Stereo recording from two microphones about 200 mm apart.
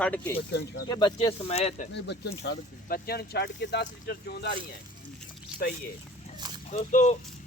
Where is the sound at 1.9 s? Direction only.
55° left (ahead or behind).